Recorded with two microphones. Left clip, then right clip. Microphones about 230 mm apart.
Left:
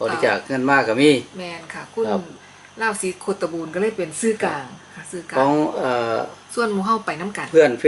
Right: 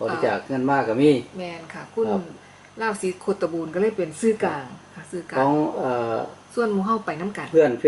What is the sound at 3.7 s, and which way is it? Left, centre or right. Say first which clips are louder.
A woman's voice: left 1 dB; centre.